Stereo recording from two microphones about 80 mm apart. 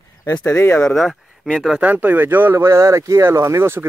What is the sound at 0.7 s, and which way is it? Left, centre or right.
Speech, centre.